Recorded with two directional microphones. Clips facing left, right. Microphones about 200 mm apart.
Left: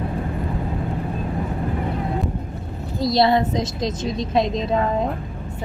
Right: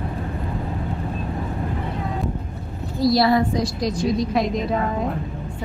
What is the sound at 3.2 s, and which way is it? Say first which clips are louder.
A woman's voice: left 4 dB; 25° left (ahead or behind).